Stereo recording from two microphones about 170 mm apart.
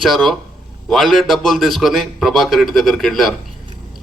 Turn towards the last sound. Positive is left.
turn(degrees=0)  # may be behind; listen again after turning